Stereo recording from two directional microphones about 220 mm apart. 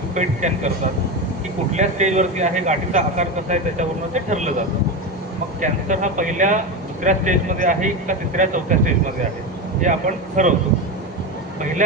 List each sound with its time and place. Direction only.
0.1 s a man's voice: 35° right (ahead or behind)
1.7 s a man's voice: 30° right (ahead or behind)
5.5 s a man's voice: 35° right (ahead or behind)
10.4 s a man's voice: 35° right (ahead or behind)